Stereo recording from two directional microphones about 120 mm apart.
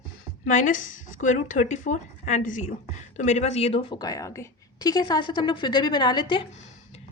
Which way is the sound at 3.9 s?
30° left (ahead or behind).